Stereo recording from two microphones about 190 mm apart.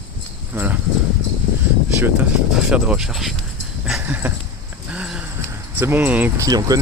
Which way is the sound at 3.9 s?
10° right (ahead or behind).